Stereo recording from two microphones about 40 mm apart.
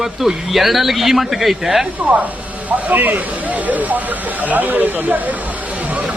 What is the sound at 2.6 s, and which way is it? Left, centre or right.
Speech, right.